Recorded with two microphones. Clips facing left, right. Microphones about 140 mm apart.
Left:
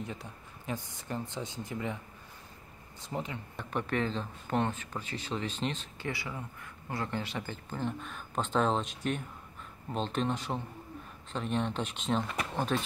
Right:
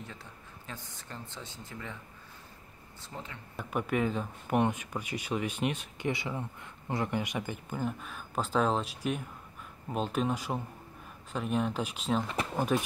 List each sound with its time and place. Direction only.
0.0 s speech: 15° left (ahead or behind)
3.0 s speech: 15° left (ahead or behind)
3.5 s speech: 10° right (ahead or behind)